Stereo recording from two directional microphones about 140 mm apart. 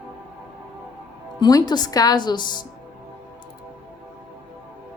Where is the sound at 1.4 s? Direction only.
30° left (ahead or behind).